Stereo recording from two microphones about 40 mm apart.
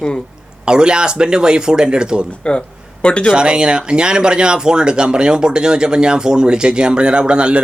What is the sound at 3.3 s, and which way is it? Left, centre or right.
Speech, right.